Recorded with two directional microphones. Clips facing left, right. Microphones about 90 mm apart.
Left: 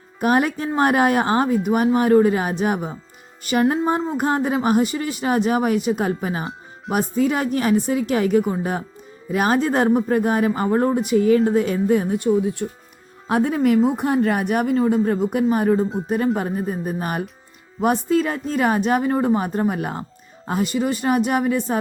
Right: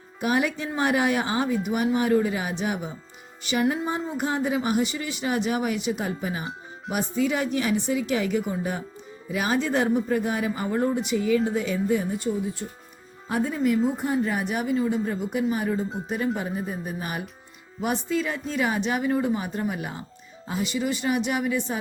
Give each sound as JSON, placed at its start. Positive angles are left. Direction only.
{"t": 0.2, "sound": "speech", "side_deg": 45}